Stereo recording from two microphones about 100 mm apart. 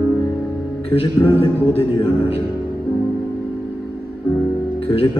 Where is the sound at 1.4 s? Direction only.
70° left (ahead or behind).